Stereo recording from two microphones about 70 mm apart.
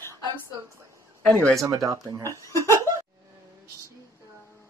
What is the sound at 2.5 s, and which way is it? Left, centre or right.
Chuckle, left.